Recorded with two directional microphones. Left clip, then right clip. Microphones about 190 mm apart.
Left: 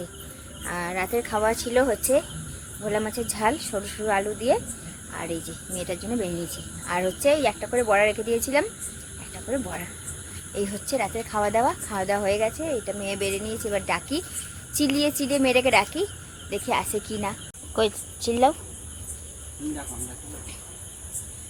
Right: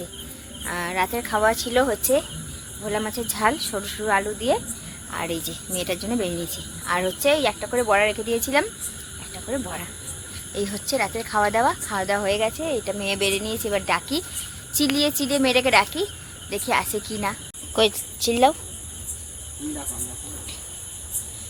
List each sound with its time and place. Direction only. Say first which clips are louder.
0.6 s speech: right 4 dB; 5° left (ahead or behind)
5.1 s speech: right 4 dB; 30° right (ahead or behind)
6.8 s speech: right 1 dB; centre (ahead or behind)
12.6 s speech: right 3 dB; 20° right (ahead or behind)
13.9 s a woman's voice: right 3 dB; centre (ahead or behind)